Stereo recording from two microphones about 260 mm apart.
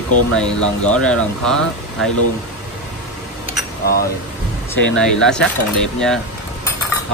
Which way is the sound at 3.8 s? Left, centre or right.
Left.